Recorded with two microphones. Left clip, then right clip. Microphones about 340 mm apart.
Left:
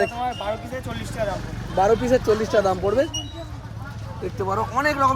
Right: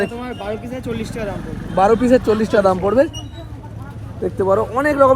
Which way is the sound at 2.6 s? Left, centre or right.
Right.